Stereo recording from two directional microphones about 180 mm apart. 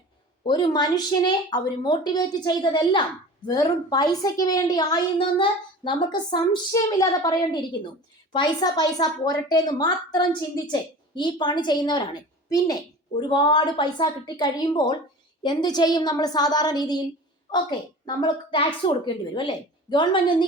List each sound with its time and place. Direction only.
0.4 s a woman's voice: 25° left (ahead or behind)